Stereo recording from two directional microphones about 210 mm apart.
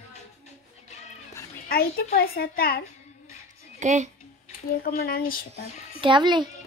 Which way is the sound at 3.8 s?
35° right (ahead or behind).